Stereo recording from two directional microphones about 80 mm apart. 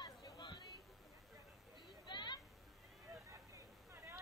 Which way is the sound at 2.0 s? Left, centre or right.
Left.